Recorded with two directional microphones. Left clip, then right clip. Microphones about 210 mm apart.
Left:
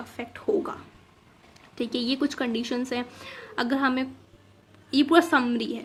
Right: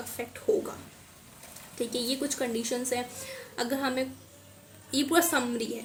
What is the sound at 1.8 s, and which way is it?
Speech, 35° left (ahead or behind).